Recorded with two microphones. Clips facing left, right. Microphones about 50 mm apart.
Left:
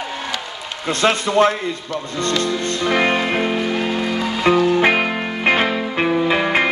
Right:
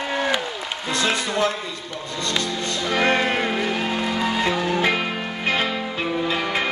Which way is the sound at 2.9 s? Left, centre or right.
Left.